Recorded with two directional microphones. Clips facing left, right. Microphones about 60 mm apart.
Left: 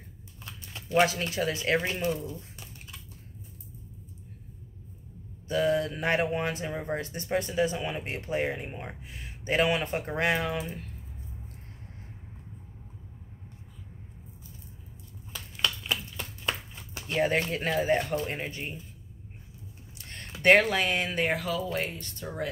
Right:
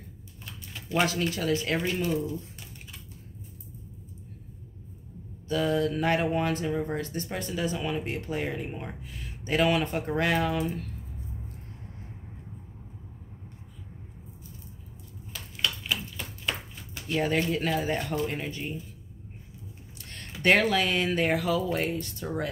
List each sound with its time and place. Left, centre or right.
0.8 s speech: left
1.5 s speech: centre
5.5 s speech: left
9.7 s speech: centre
9.9 s speech: left
17.1 s speech: left
20.1 s a sound: left
20.7 s speech: left
21.1 s speech: centre